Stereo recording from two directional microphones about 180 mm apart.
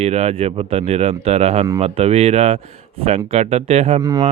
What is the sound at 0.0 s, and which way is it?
Speech, 35° right (ahead or behind).